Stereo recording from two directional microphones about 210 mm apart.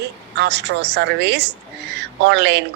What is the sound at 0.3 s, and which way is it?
A woman's voice, 55° right (ahead or behind).